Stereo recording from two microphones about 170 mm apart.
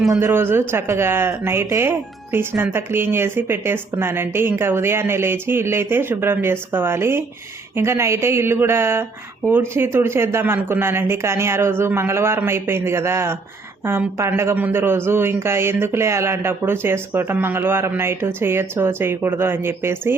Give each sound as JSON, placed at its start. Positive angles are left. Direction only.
{"t": 0.1, "sound": "speech", "side_deg": -15}